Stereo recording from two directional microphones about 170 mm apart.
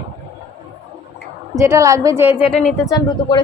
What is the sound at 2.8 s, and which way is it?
Speech, 20° left (ahead or behind).